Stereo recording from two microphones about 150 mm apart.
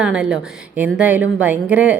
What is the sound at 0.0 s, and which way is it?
A woman's voice, 5° right (ahead or behind).